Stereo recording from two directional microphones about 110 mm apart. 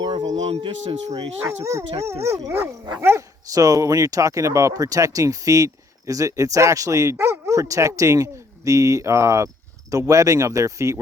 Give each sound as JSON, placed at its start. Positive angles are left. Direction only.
{"t": 0.0, "sound": "a sound", "side_deg": -45}
{"t": 0.3, "sound": "speech", "side_deg": -75}
{"t": 0.6, "sound": "speech", "side_deg": -60}
{"t": 1.6, "sound": "speech", "side_deg": -30}